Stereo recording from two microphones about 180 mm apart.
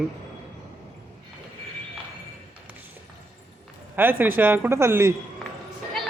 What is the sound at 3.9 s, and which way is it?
Speech, 10° right (ahead or behind).